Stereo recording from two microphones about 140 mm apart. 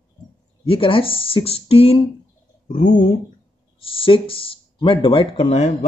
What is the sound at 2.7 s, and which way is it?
Speech, 60° left (ahead or behind).